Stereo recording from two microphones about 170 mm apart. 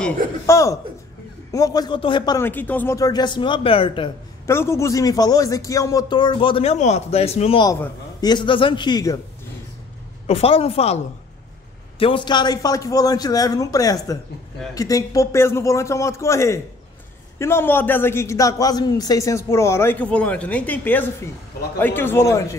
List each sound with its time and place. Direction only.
0.5 s a man's voice: 20° left (ahead or behind)
2.4 s speech: 10° left (ahead or behind); by 4.1 s 30° left (ahead or behind)
4.5 s speech: 15° left (ahead or behind); by 7.6 s 35° left (ahead or behind)
8.2 s speech: 25° left (ahead or behind)
10.2 s speech: 35° left (ahead or behind)
12.0 s a man's voice: 30° left (ahead or behind)